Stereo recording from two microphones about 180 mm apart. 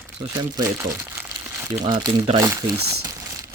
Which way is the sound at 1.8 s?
25° right (ahead or behind).